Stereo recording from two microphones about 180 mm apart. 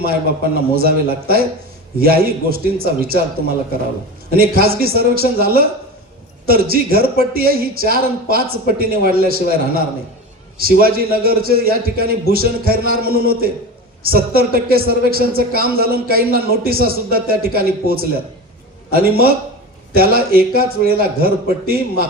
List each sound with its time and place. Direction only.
0.0 s a woman's voice: 55° right (ahead or behind)
4.3 s a woman's voice: 55° right (ahead or behind)